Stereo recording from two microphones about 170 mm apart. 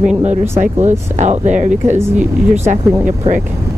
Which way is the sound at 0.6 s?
40° right (ahead or behind).